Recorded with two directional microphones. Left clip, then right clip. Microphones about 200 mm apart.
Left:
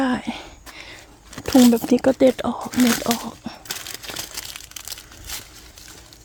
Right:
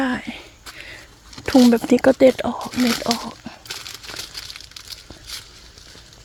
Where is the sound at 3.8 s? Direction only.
40° left (ahead or behind).